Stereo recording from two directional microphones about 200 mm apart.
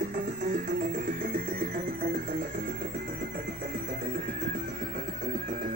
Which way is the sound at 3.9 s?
45° right (ahead or behind).